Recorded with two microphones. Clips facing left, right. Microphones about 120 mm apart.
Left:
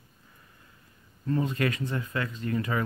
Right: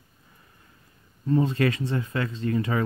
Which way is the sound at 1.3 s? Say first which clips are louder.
Right 5 dB; 30° right (ahead or behind).